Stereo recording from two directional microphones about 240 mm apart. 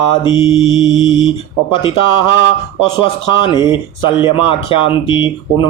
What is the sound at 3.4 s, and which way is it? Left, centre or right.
Speech, centre.